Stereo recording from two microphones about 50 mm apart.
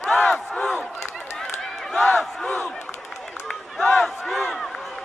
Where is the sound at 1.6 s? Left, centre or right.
Centre.